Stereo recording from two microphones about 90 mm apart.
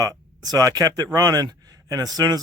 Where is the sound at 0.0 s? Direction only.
45° right (ahead or behind).